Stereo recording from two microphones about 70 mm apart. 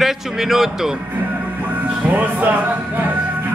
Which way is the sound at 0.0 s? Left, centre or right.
Centre.